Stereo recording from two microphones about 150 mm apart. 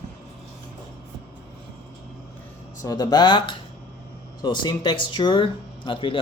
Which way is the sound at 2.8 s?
25° left (ahead or behind).